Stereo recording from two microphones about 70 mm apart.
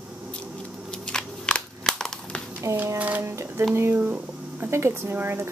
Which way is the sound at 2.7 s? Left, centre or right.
Right.